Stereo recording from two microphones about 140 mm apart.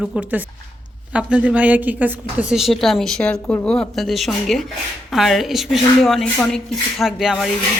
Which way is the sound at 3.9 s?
Centre (ahead or behind).